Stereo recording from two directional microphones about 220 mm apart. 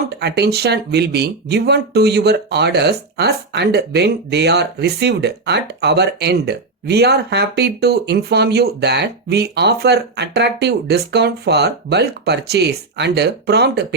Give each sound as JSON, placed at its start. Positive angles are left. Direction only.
{"t": 0.2, "sound": "speech", "side_deg": -50}